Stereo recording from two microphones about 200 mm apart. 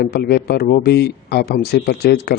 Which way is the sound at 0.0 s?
50° left (ahead or behind).